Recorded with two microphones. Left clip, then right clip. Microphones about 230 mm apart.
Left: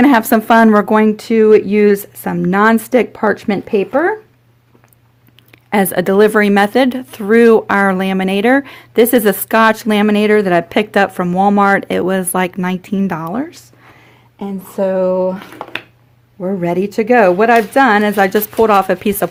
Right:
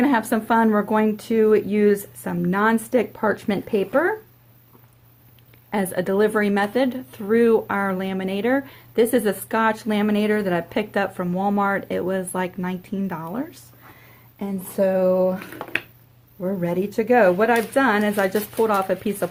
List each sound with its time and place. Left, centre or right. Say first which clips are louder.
0.0 s speech: left 10 dB; left
5.7 s speech: left 10 dB; left
14.8 s speech: left 5 dB; left
16.4 s speech: left 8 dB; left